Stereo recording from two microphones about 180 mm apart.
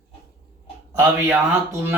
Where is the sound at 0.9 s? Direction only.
15° right (ahead or behind).